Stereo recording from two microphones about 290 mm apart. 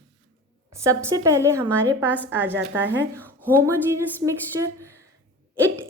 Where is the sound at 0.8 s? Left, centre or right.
Centre.